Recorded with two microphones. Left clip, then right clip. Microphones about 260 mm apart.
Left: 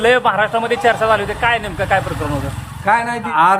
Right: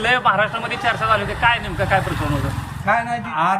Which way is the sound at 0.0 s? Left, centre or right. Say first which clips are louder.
Left 3 dB; centre.